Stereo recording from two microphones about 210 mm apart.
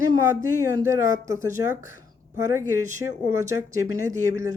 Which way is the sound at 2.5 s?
15° right (ahead or behind).